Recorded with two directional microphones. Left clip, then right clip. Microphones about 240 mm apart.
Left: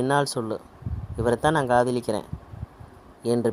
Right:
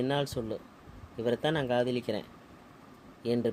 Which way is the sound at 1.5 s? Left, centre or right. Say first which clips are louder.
Left 8 dB; left.